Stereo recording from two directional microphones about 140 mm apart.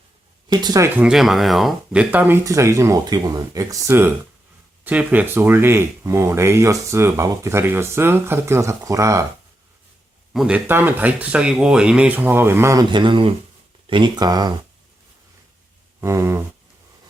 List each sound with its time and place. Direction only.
0.5 s speech: 30° right (ahead or behind)
0.9 s speech: 5° right (ahead or behind); by 9.2 s 20° right (ahead or behind)
10.3 s speech: 10° right (ahead or behind); by 14.5 s 30° right (ahead or behind)
16.0 s a sound: 20° right (ahead or behind)